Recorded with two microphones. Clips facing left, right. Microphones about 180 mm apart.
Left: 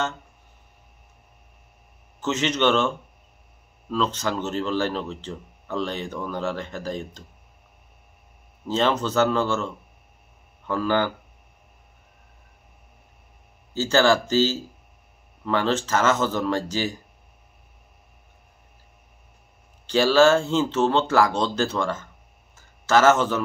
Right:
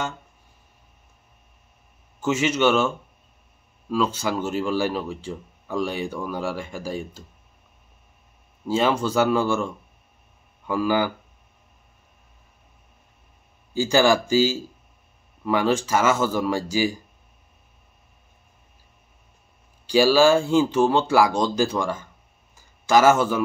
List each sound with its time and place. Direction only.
2.1 s speech: 10° right (ahead or behind)
3.9 s speech: 10° right (ahead or behind)
8.6 s speech: 10° right (ahead or behind)
13.7 s speech: 15° right (ahead or behind)
19.9 s speech: 10° right (ahead or behind)